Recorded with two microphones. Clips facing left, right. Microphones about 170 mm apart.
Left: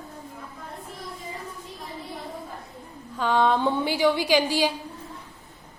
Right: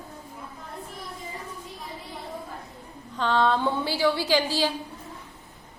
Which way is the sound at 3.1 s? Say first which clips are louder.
Left 1 dB; 10° left (ahead or behind).